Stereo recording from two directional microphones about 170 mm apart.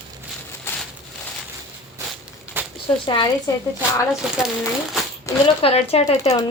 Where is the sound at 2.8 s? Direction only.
30° left (ahead or behind).